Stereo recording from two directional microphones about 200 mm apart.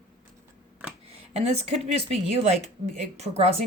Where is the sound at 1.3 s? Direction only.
30° right (ahead or behind).